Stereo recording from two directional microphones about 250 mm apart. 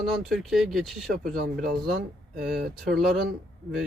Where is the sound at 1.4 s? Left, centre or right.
Right.